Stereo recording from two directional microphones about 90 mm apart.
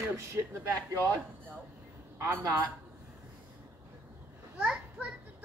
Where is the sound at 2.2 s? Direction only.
30° right (ahead or behind).